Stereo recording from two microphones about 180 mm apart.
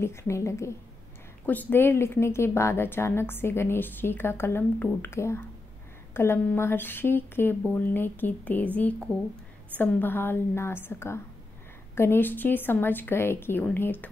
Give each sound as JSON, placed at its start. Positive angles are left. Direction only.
{"t": 0.0, "sound": "a woman's voice", "side_deg": 15}